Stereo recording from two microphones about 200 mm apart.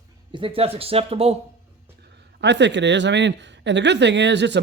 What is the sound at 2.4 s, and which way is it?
Speech, 60° right (ahead or behind).